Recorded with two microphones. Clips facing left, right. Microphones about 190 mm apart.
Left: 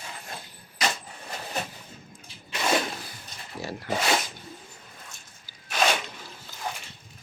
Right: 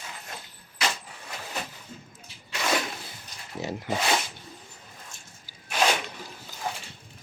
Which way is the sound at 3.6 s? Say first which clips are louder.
Right 3 dB; 20° right (ahead or behind).